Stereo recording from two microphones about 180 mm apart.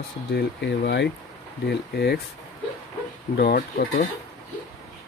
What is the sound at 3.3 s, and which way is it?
Speech, 55° left (ahead or behind).